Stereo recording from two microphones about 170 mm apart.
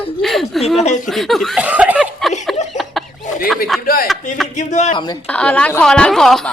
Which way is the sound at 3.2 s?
45° left (ahead or behind).